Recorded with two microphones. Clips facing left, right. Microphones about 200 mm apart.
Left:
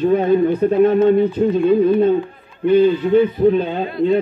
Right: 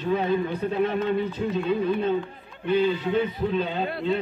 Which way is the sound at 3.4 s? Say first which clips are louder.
Left 13 dB; 50° left (ahead or behind).